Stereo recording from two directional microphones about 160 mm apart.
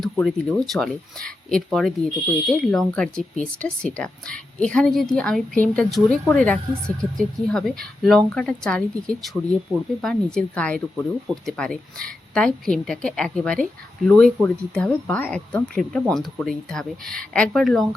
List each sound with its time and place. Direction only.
0.0 s a woman's voice: centre (ahead or behind)